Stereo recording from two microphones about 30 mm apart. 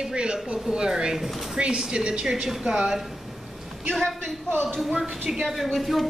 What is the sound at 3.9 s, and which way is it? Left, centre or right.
Speech, centre.